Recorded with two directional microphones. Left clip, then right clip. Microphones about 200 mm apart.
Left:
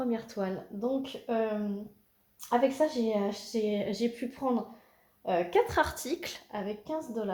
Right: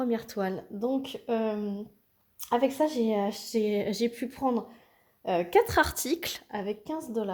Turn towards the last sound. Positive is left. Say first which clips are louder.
# right 2 dB
turn(degrees=-55)  # may be behind; listen again after turning